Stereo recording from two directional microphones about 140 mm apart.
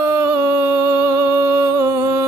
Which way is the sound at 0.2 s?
20° right (ahead or behind).